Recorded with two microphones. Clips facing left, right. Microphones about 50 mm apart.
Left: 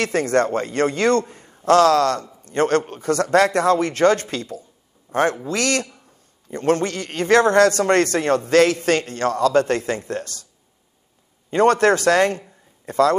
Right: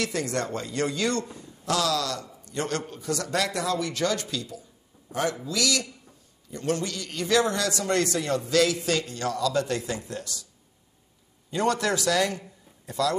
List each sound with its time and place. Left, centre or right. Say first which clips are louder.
0.0 s a man's voice: left 9 dB; left
11.5 s a man's voice: left 10 dB; left